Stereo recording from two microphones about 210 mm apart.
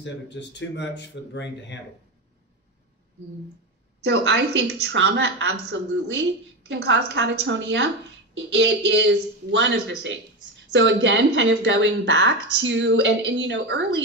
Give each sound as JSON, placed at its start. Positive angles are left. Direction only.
{"t": 0.0, "sound": "speech", "side_deg": 60}
{"t": 4.0, "sound": "speech", "side_deg": -60}